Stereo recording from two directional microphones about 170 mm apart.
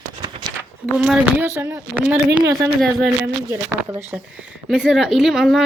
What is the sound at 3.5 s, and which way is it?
A woman's voice, 15° right (ahead or behind).